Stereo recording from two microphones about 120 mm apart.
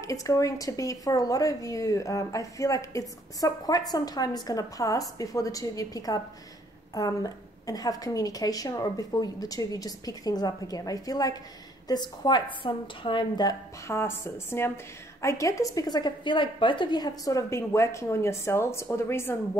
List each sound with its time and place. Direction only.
0.0 s a woman's voice: 30° left (ahead or behind)
13.8 s speech: 20° left (ahead or behind)